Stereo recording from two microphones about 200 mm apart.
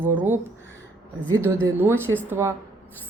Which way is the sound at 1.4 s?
15° right (ahead or behind).